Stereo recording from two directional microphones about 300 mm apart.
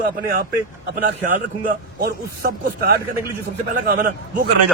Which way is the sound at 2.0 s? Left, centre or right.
Right.